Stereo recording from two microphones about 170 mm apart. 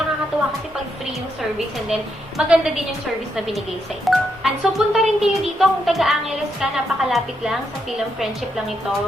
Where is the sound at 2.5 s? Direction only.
5° right (ahead or behind).